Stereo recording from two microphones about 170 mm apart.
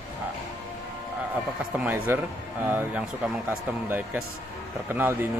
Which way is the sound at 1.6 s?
10° right (ahead or behind).